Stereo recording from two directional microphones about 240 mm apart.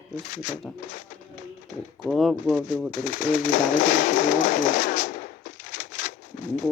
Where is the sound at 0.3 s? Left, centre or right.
Left.